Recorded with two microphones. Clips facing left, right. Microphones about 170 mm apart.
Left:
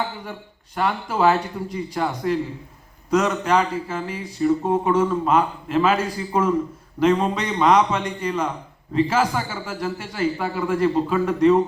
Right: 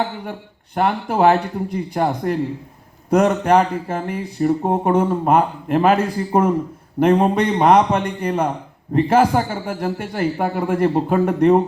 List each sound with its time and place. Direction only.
0.8 s a man's voice: 60° right (ahead or behind)